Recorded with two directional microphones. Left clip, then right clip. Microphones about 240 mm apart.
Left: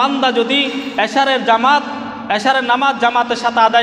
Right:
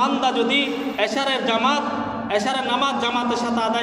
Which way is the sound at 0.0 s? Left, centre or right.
Left.